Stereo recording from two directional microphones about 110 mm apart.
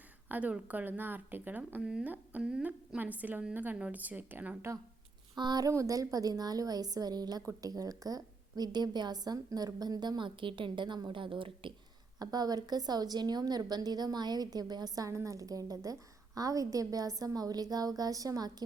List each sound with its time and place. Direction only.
0.3 s a woman's voice: 15° right (ahead or behind)
1.8 s a woman's voice: 5° right (ahead or behind)
5.3 s a woman's voice: 35° right (ahead or behind)
12.2 s a woman's voice: 35° right (ahead or behind)